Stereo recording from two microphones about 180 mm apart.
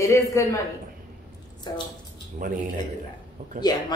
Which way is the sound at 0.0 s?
15° left (ahead or behind).